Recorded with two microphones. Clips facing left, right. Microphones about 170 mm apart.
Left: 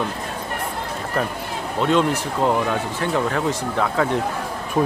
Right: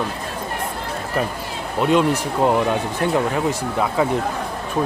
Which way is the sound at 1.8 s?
15° right (ahead or behind).